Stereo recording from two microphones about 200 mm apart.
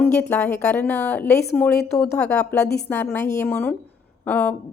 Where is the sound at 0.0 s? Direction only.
10° left (ahead or behind).